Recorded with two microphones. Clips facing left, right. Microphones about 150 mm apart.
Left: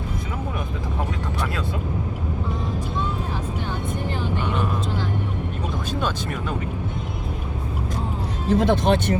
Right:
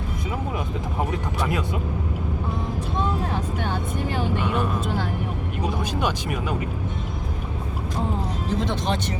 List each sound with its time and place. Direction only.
5.9 s speech: 15° right (ahead or behind)
8.5 s speech: 55° left (ahead or behind)